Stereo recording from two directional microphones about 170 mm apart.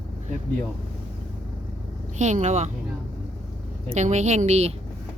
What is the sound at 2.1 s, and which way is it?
Speech, 45° right (ahead or behind).